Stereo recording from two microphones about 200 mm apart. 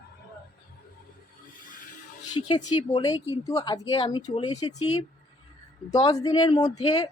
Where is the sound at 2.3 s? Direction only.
25° left (ahead or behind).